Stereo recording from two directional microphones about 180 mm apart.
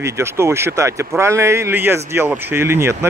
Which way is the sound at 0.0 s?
15° right (ahead or behind).